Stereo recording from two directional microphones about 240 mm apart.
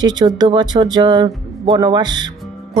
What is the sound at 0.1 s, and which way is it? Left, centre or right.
Speech, centre.